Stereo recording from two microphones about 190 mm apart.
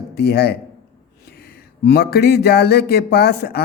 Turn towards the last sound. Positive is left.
turn(degrees=55)  # may be behind; listen again after turning